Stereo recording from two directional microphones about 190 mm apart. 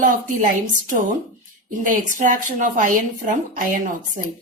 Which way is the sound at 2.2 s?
45° right (ahead or behind).